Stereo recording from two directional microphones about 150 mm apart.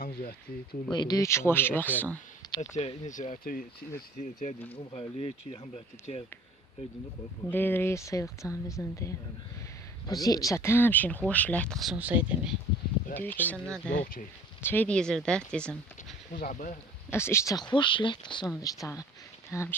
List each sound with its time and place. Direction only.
0.0 s speech: 90° left
0.9 s speech: 30° left (ahead or behind); by 2.1 s 10° left (ahead or behind)
2.6 s speech: 45° left (ahead or behind); by 4.5 s 65° left (ahead or behind)
5.7 s speech: 45° left (ahead or behind)
7.5 s speech: 15° left (ahead or behind)
11.9 s speech: 10° right (ahead or behind)
13.1 s speech: 10° left (ahead or behind)
14.0 s speech: 60° left (ahead or behind)
14.6 s speech: 15° left (ahead or behind)
16.3 s speech: 75° left (ahead or behind); by 16.7 s 60° left (ahead or behind)
17.1 s speech: 15° left (ahead or behind)